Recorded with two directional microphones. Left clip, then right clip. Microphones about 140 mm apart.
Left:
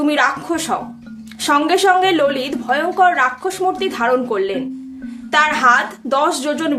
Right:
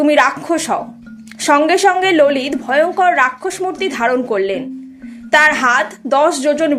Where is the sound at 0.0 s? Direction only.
30° right (ahead or behind).